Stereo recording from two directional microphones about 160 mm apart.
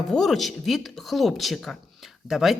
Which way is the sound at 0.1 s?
Centre (ahead or behind).